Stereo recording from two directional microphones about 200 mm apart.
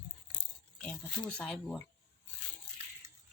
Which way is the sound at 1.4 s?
5° left (ahead or behind).